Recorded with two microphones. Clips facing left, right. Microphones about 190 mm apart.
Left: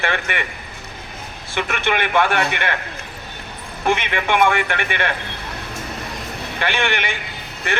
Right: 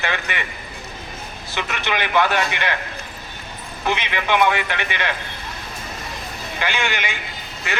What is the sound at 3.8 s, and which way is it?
A man's voice, 50° left (ahead or behind).